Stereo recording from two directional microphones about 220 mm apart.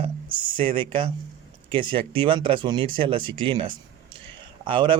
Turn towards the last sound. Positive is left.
turn(degrees=-20)  # may be behind; listen again after turning